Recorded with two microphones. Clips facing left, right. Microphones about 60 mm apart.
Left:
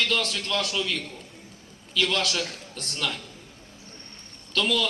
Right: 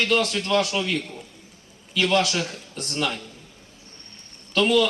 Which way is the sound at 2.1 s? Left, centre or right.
Right.